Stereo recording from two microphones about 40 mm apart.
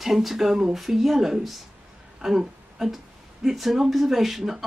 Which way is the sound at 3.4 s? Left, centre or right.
Centre.